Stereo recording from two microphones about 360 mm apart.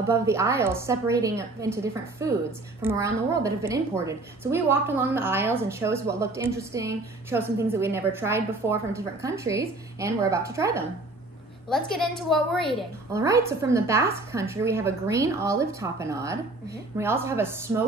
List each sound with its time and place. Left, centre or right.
0.3 s a woman's voice: centre